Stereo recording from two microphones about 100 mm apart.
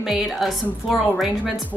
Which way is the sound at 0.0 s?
Centre (ahead or behind).